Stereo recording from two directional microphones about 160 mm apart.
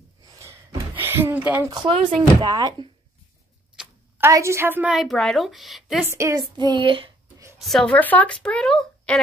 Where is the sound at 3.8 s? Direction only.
10° right (ahead or behind).